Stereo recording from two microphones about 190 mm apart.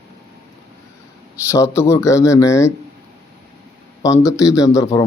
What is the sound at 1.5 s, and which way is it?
Speech, 15° left (ahead or behind).